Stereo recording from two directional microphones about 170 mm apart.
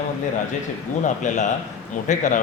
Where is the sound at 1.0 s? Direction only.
45° left (ahead or behind).